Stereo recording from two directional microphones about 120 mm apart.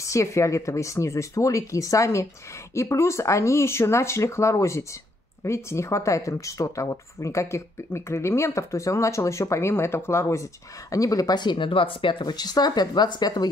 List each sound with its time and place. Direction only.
0.0 s speech: 25° left (ahead or behind)